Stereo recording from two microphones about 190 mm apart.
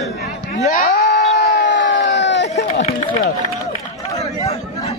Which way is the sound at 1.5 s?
65° left (ahead or behind).